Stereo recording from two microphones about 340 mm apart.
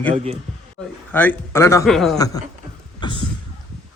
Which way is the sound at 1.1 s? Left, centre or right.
Centre.